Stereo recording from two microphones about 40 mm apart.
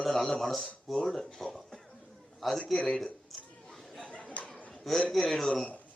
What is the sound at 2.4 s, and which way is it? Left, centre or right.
Speech, centre.